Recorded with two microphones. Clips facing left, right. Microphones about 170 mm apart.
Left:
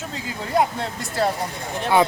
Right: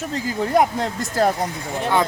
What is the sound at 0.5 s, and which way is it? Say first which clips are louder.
Speech: right 2 dB; 45° right (ahead or behind).